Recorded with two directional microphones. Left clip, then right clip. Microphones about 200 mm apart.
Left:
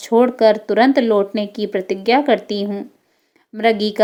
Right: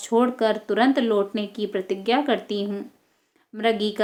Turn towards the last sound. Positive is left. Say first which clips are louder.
# left 6 dB
turn(degrees=30)  # may be behind; listen again after turning